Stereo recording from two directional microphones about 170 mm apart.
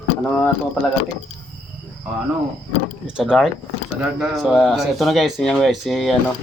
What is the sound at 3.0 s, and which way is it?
Speech, 5° right (ahead or behind).